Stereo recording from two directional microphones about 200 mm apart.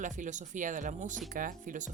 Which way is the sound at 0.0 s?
40° right (ahead or behind).